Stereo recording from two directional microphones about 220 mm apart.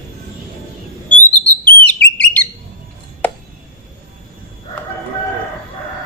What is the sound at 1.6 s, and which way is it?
Whistle, 5° left (ahead or behind).